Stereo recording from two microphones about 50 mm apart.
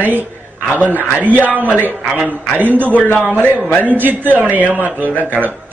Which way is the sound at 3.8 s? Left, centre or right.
Right.